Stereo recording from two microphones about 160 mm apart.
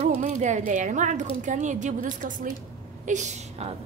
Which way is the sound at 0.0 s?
50° right (ahead or behind).